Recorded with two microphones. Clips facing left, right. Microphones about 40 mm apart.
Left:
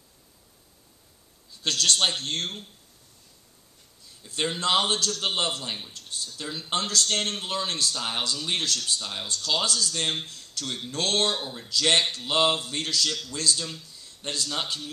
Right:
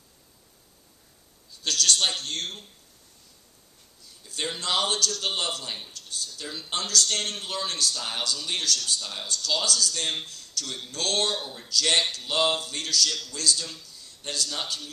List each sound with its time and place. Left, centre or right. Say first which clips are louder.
1.6 s a man's voice: left 1 dB; left
4.2 s a man's voice: left 4 dB; left
5.7 s speech: left 1 dB; centre
5.9 s a man's voice: left 1 dB; left
9.0 s a man's voice: left 1 dB; left